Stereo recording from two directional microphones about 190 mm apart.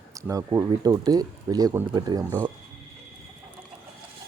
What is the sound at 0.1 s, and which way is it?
Speech, 15° right (ahead or behind).